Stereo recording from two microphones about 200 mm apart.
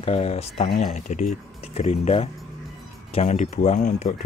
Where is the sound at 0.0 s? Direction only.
30° left (ahead or behind).